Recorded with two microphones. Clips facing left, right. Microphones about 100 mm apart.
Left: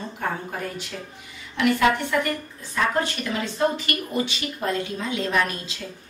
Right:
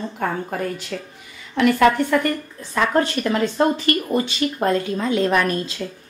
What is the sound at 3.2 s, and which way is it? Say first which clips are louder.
Speech: right 5 dB; 45° right (ahead or behind).